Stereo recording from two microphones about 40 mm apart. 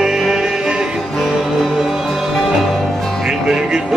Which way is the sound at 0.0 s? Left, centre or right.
Centre.